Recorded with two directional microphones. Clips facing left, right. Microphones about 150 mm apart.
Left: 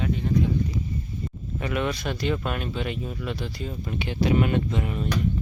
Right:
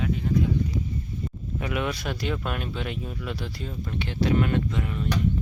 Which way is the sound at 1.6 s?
5° right (ahead or behind).